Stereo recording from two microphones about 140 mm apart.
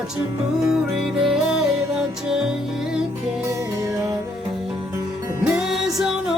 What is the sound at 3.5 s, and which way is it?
Music, 20° right (ahead or behind).